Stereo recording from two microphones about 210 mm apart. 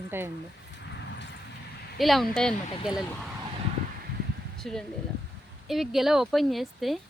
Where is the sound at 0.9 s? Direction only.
55° left (ahead or behind).